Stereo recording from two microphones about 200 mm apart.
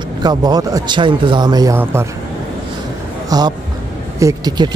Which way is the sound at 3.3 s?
20° right (ahead or behind).